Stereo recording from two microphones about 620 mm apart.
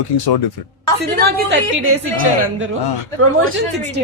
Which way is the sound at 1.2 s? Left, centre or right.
Centre.